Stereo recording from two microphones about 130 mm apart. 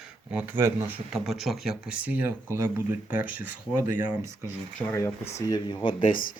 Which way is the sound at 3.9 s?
80° left.